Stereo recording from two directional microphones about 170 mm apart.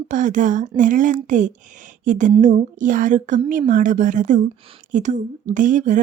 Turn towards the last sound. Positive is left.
turn(degrees=-50)  # may be behind; listen again after turning